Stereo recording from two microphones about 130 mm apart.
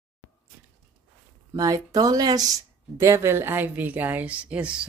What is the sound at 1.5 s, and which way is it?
A woman's voice, 25° right (ahead or behind).